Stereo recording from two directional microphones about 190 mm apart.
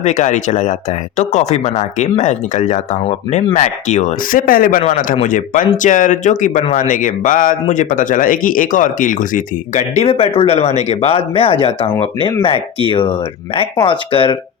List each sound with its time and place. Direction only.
0.0 s speech: 40° left (ahead or behind)